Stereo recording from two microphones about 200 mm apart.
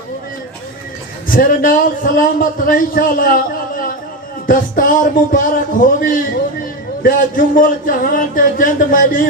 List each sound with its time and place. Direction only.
1.3 s a man's voice: 45° left (ahead or behind)